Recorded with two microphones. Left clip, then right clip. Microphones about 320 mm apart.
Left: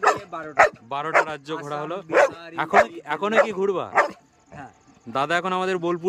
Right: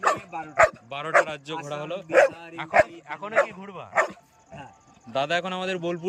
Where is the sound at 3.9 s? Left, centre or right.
Centre.